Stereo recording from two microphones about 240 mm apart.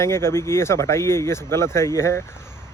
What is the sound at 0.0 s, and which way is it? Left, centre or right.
Speech, centre.